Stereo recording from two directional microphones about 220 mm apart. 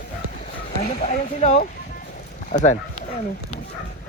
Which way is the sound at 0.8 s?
35° left (ahead or behind).